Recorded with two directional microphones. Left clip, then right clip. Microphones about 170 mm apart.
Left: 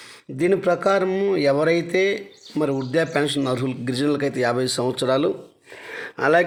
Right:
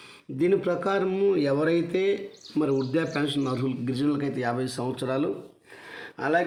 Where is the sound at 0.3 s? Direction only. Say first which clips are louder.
Left 4 dB; 45° left (ahead or behind).